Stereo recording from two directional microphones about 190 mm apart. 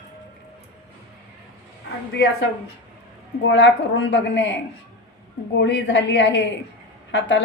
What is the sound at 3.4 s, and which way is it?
A woman's voice, 70° left (ahead or behind).